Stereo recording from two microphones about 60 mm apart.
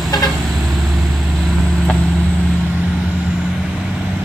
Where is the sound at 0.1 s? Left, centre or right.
Left.